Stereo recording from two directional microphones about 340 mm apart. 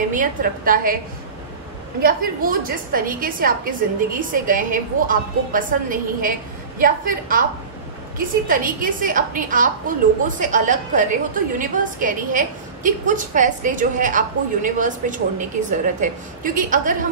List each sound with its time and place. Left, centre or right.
0.1 s a woman's voice: right
2.0 s a woman's voice: right
8.5 s a woman's voice: right